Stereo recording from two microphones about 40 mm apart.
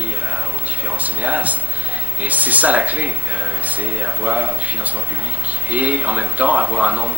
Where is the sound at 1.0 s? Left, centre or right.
Right.